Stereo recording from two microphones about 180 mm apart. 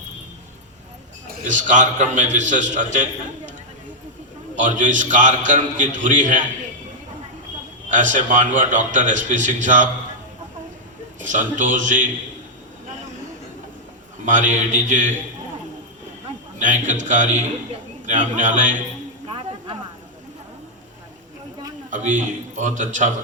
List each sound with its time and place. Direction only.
1.5 s a man's voice: 45° right (ahead or behind)
4.6 s a man's voice: 45° right (ahead or behind)
7.9 s a man's voice: 45° right (ahead or behind)
11.3 s a man's voice: 45° right (ahead or behind)
14.3 s a man's voice: 45° right (ahead or behind)
16.6 s a man's voice: 45° right (ahead or behind)
21.8 s a man's voice: 45° right (ahead or behind)